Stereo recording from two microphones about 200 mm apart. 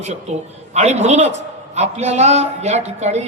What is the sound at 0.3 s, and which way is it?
A man's voice, 35° right (ahead or behind).